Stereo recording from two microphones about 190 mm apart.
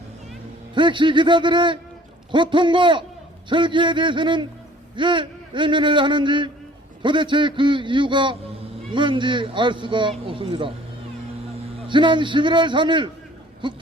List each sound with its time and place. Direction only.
0.7 s speech: 25° right (ahead or behind)
11.9 s speech: 25° right (ahead or behind)